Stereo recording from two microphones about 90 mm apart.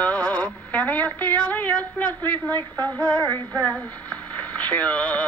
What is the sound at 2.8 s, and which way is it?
Female singing, 50° right (ahead or behind).